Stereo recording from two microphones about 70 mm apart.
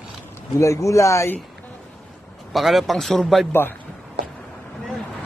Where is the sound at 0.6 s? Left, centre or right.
Left.